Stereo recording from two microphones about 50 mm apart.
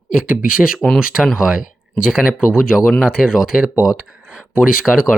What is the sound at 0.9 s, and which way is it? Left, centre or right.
Speech, centre.